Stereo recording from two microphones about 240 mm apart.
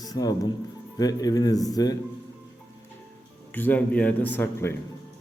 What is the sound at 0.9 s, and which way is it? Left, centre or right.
Speech, centre.